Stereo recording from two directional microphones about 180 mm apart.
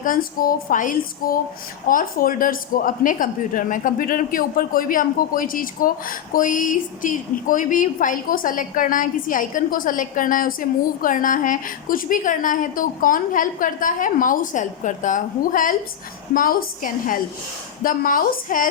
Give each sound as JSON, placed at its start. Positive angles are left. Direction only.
{"t": 0.0, "sound": "speech", "side_deg": 50}